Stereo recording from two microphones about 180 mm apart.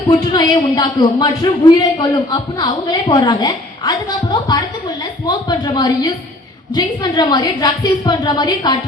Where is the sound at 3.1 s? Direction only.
20° left (ahead or behind).